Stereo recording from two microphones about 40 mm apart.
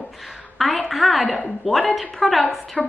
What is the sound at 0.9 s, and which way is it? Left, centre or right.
A woman's voice, centre.